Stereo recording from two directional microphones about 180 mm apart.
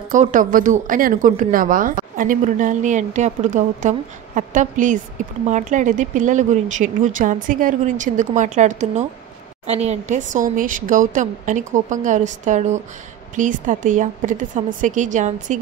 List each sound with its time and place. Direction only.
0.1 s a woman's voice: 45° right (ahead or behind)